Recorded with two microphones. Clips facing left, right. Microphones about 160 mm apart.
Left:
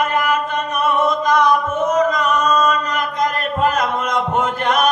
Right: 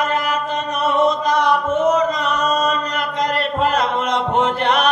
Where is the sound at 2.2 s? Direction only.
45° left (ahead or behind).